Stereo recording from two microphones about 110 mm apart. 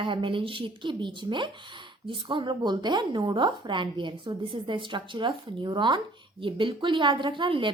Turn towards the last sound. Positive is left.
turn(degrees=-50)  # may be behind; listen again after turning